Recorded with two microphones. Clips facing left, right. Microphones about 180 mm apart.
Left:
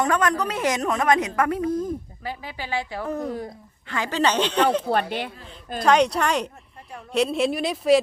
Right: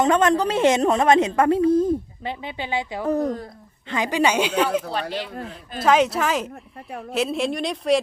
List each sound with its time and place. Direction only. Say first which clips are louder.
0.0 s a woman's voice: right 4 dB; 25° right (ahead or behind); by 4.8 s 10° right (ahead or behind)
4.9 s speech: left 3 dB; 55° left (ahead or behind)
5.8 s speech: even; 5° right (ahead or behind)